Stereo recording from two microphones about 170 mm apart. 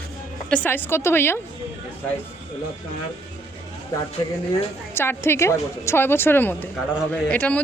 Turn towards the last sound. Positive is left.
turn(degrees=10)  # may be behind; listen again after turning